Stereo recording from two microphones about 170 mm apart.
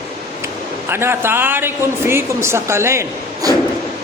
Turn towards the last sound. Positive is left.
turn(degrees=-15)  # may be behind; listen again after turning